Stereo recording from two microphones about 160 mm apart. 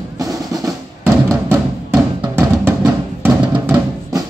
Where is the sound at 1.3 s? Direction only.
15° right (ahead or behind).